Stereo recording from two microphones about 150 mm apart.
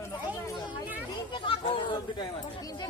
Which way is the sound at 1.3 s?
35° left (ahead or behind).